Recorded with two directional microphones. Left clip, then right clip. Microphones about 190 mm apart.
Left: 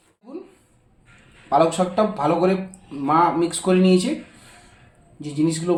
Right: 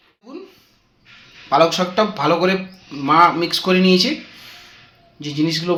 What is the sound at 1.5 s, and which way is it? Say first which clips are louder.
A man's voice: right 3 dB; centre (ahead or behind).